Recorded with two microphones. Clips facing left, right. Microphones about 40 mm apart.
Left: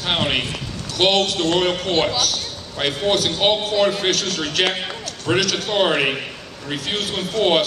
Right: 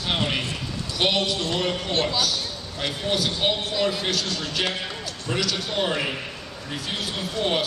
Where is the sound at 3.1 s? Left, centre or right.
Left.